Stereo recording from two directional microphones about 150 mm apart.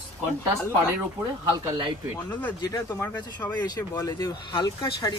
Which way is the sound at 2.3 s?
10° left (ahead or behind).